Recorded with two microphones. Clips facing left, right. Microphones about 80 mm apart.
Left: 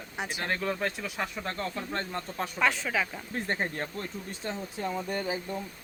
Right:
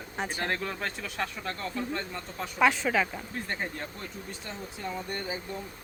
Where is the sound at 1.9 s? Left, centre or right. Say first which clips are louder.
Left 2 dB; left.